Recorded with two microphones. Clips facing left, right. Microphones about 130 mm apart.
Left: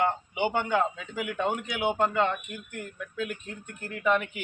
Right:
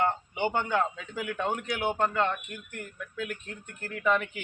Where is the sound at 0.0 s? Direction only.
15° left (ahead or behind).